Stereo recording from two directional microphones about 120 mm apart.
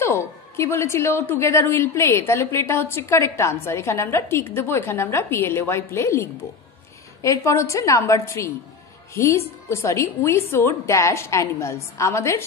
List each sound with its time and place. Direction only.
0.0 s a woman's voice: 25° left (ahead or behind)